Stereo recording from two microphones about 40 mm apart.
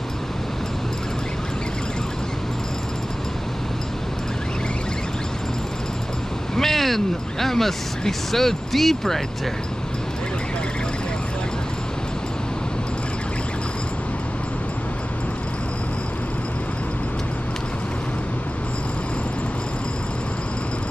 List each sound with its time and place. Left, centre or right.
6.5 s speech: centre